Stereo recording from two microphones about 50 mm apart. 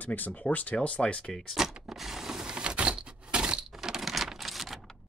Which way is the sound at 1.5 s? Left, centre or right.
Centre.